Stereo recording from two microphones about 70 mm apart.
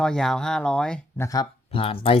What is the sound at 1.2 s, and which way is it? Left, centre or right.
Speech, left.